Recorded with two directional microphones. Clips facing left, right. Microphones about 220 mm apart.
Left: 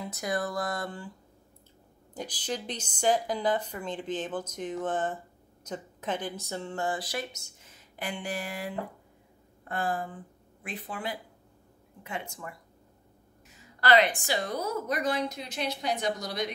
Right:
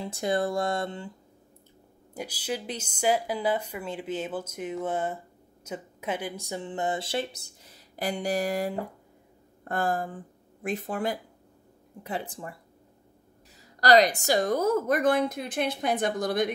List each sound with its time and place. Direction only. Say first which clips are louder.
0.0 s speech: right 5 dB; 30° right (ahead or behind)
2.1 s a woman's voice: right 2 dB; 10° right (ahead or behind); by 11.1 s 45° right (ahead or behind)
12.0 s speech: right 4 dB; 35° right (ahead or behind)
13.6 s a woman's voice: right 4 dB; 40° right (ahead or behind)